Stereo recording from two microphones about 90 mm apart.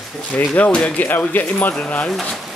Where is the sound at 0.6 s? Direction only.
10° left (ahead or behind).